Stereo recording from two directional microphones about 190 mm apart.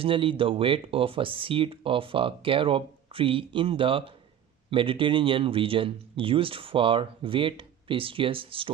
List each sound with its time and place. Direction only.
0.0 s speech: 25° right (ahead or behind)